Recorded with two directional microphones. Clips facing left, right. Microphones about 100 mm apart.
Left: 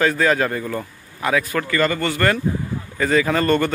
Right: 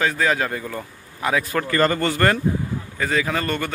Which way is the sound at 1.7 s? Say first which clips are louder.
Right 2 dB; 35° right (ahead or behind).